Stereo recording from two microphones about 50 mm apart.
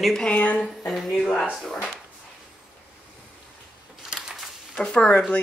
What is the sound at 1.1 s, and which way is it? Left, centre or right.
Speech, centre.